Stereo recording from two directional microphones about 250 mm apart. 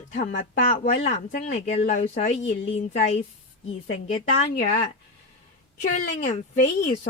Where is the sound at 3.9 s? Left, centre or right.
Left.